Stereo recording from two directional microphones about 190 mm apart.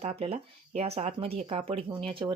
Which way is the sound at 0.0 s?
35° right (ahead or behind).